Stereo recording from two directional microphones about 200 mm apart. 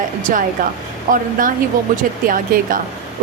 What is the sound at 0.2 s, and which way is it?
Speech, 40° right (ahead or behind).